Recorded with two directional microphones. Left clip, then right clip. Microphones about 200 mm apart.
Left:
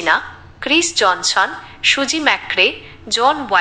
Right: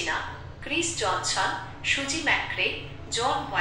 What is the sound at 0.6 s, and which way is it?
A woman's voice, 45° left (ahead or behind).